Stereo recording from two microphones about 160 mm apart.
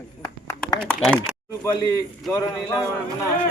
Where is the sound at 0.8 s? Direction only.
5° left (ahead or behind).